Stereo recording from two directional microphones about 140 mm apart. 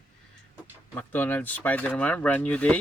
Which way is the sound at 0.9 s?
15° left (ahead or behind).